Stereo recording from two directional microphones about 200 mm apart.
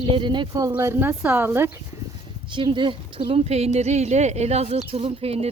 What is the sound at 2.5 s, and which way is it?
Speech, 25° right (ahead or behind).